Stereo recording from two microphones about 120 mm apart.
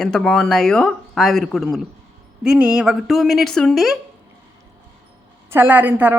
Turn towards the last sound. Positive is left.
turn(degrees=-15)  # may be behind; listen again after turning